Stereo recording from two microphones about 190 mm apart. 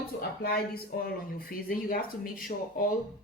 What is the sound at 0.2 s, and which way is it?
Speech, 55° left (ahead or behind).